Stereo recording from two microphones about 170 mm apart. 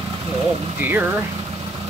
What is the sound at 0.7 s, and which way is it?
Speech, 10° right (ahead or behind).